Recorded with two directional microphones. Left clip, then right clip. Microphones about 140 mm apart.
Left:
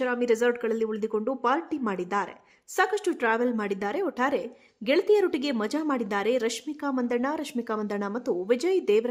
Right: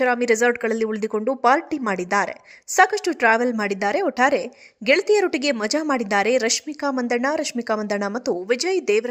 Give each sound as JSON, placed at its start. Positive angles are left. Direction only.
{"t": 0.0, "sound": "speech", "side_deg": -20}